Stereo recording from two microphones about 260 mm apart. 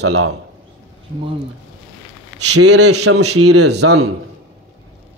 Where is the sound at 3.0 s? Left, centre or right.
Right.